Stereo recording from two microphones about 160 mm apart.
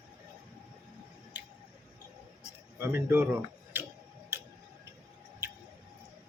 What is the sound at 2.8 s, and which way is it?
Speech, 15° right (ahead or behind).